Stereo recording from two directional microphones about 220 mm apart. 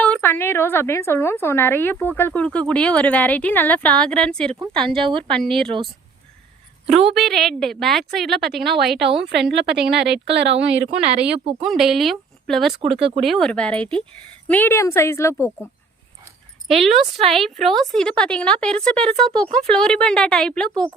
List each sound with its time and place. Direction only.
0.0 s a woman's voice: 5° left (ahead or behind)
4.9 s speech: 25° right (ahead or behind)
5.4 s speech: centre (ahead or behind)
7.1 s speech: centre (ahead or behind)
8.6 s speech: 50° right (ahead or behind)
11.6 s a woman's voice: centre (ahead or behind)
16.6 s speech: centre (ahead or behind)